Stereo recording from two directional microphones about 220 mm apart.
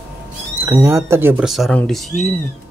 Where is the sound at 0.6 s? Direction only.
10° right (ahead or behind).